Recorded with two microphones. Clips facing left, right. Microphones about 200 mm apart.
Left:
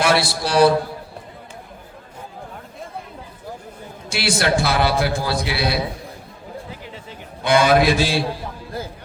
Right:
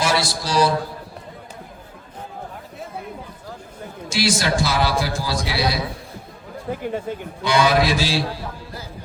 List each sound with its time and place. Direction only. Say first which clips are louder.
0.0 s a man's voice: left 3 dB; 60° left (ahead or behind)
4.1 s a man's voice: left 1 dB; 60° left (ahead or behind)
6.7 s speech: right 11 dB; 50° right (ahead or behind)
7.4 s a man's voice: left 3 dB; 55° left (ahead or behind)